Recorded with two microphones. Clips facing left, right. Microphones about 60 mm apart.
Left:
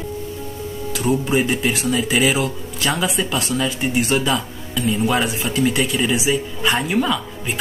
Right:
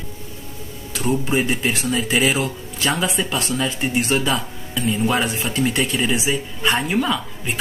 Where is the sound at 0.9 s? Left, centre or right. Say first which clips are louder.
Left 2 dB; centre.